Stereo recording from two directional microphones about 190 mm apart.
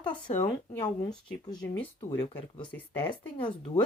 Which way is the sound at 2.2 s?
30° left (ahead or behind).